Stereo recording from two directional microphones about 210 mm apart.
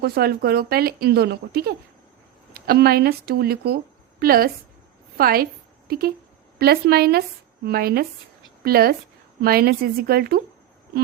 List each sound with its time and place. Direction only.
0.0 s speech: 45° right (ahead or behind)